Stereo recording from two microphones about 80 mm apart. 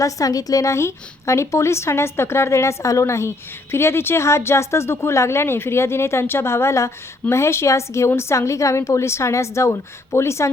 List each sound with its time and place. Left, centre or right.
0.0 s a woman's voice: left